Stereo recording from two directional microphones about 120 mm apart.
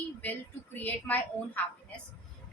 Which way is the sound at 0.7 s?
15° left (ahead or behind).